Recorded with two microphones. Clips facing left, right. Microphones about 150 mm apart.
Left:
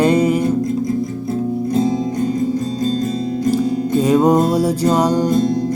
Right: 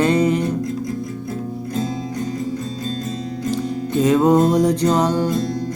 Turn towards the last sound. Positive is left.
turn(degrees=15)  # may be behind; listen again after turning